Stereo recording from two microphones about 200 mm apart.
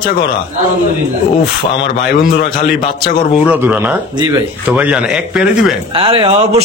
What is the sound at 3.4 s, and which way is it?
A man's voice, 10° right (ahead or behind).